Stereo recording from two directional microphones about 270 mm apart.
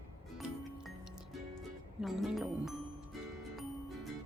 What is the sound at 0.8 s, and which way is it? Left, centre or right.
Music, centre.